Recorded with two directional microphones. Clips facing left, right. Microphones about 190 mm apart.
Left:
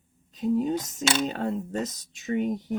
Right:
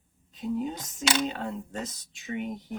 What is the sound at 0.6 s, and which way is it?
Speech, 40° left (ahead or behind).